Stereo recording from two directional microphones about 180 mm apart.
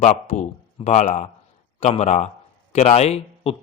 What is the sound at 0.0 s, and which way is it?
A man's voice, 40° left (ahead or behind).